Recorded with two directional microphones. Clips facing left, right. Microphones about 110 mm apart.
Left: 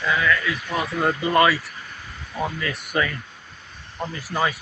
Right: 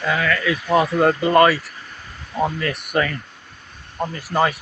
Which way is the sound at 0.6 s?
45° right (ahead or behind).